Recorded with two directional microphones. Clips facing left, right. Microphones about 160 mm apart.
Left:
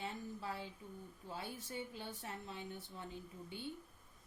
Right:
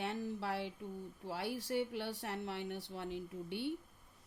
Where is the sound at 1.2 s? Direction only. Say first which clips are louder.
Right 7 dB; 75° right (ahead or behind).